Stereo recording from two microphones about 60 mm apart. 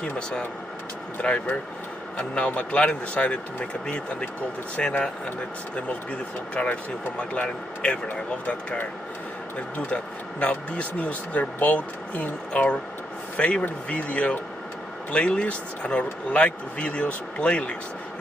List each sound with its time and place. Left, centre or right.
0.0 s speech: left
6.5 s speech: left